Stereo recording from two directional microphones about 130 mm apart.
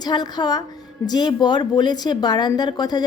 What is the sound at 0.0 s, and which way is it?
A woman's voice, 35° left (ahead or behind).